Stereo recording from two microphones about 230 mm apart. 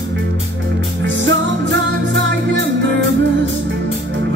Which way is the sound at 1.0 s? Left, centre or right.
Right.